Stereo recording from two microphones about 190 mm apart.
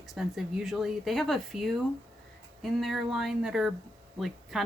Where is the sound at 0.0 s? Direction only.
Centre (ahead or behind).